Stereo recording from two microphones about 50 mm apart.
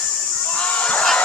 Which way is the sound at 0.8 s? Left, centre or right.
Left.